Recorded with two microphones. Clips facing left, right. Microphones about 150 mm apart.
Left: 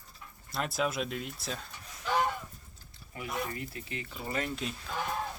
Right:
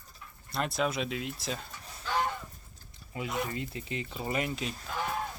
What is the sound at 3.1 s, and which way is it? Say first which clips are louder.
Speech: right 2 dB; 20° right (ahead or behind).